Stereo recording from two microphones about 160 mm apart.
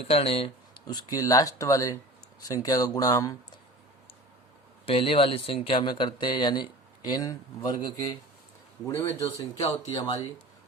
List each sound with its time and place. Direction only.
0.1 s speech: 40° left (ahead or behind); by 3.6 s 20° left (ahead or behind)
4.9 s speech: 35° left (ahead or behind)
9.6 s speech: 25° left (ahead or behind)